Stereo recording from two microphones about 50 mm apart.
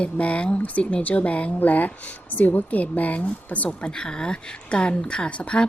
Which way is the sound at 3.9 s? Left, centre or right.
Centre.